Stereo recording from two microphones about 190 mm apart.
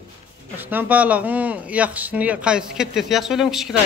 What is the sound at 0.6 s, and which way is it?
Speech, 10° right (ahead or behind).